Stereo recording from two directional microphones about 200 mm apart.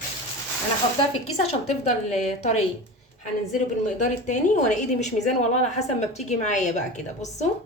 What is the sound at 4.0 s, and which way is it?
Speech, 35° left (ahead or behind).